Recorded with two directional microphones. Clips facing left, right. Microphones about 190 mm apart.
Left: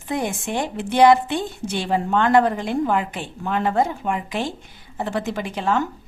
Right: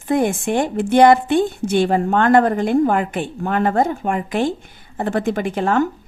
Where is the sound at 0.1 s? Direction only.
50° right (ahead or behind).